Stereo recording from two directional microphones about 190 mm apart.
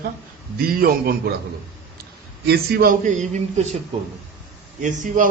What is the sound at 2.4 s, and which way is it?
A man's voice, 55° right (ahead or behind).